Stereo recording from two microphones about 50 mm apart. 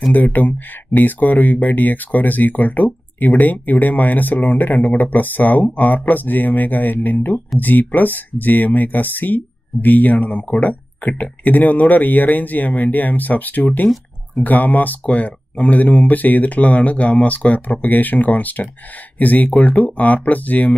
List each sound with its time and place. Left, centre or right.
0.1 s speech: left